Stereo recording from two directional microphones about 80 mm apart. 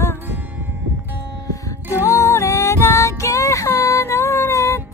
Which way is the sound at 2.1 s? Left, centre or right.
Left.